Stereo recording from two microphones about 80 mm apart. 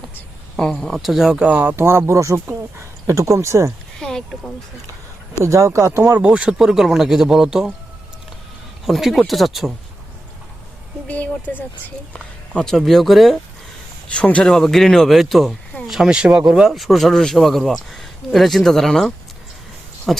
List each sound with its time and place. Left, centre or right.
0.6 s speech: centre
1.5 s speech: centre
1.7 s speech: right
4.3 s speech: centre
5.4 s speech: right
6.1 s speech: centre
8.9 s speech: centre
11.1 s speech: centre
12.1 s speech: centre
14.1 s speech: centre